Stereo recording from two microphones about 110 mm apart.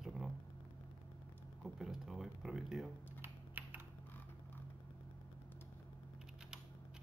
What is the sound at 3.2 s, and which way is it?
Typing, 15° right (ahead or behind).